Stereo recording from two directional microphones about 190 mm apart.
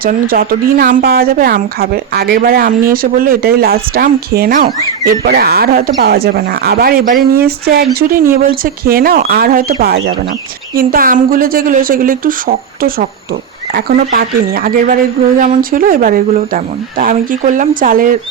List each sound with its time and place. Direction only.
0.0 s a woman's voice: 50° right (ahead or behind)